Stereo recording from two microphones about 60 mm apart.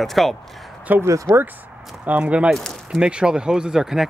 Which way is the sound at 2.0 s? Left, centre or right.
Right.